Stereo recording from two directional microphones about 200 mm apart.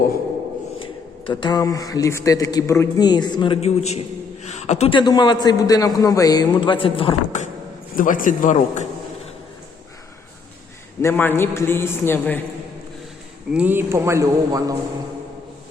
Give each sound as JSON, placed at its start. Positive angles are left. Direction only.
{"t": 0.8, "sound": "a man's voice", "side_deg": 25}
{"t": 11.0, "sound": "a man's voice", "side_deg": 10}
{"t": 13.5, "sound": "speech", "side_deg": -10}